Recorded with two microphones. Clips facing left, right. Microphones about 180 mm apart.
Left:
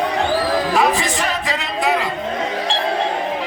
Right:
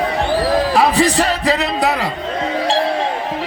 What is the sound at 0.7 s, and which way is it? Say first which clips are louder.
Music: right 4 dB; 35° right (ahead or behind).